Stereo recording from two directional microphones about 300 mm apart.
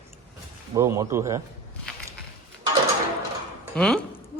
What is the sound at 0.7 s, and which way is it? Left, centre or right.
Speech, centre.